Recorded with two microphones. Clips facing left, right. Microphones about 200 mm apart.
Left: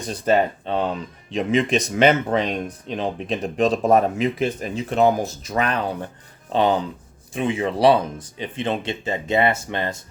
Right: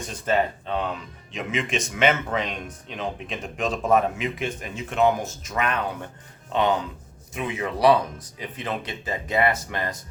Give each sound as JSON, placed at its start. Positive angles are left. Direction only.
{"t": 0.0, "sound": "speech", "side_deg": 35}